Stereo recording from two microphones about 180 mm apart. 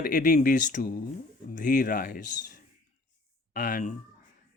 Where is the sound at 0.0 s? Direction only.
45° left (ahead or behind).